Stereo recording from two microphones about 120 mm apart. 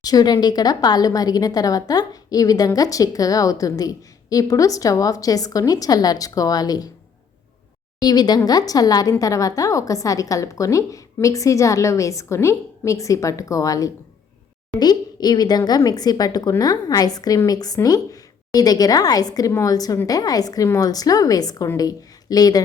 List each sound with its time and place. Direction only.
0.0 s a woman's voice: 30° left (ahead or behind)
8.0 s a woman's voice: 35° left (ahead or behind)